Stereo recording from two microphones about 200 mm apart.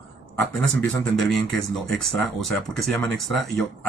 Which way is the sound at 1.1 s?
Centre (ahead or behind).